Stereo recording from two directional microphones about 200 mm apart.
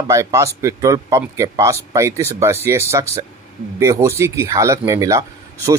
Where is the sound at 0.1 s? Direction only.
15° right (ahead or behind).